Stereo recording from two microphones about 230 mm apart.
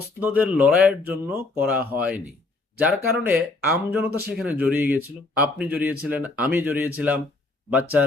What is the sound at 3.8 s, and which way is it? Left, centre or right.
Speech, centre.